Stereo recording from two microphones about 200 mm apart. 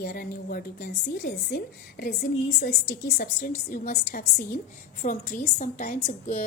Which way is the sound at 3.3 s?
40° left (ahead or behind).